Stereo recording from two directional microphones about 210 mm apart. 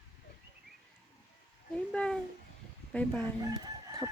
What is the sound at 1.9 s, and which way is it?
Speech, 5° left (ahead or behind).